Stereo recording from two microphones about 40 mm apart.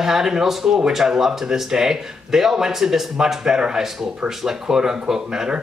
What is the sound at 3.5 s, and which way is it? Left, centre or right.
A man's voice, right.